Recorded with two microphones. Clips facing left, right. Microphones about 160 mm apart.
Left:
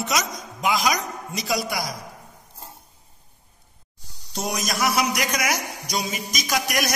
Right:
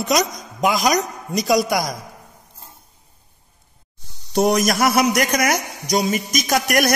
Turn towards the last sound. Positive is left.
turn(degrees=-55)  # may be behind; listen again after turning